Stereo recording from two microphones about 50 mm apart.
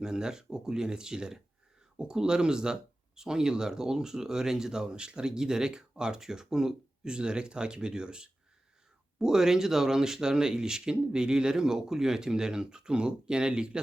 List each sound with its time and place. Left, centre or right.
0.0 s speech: centre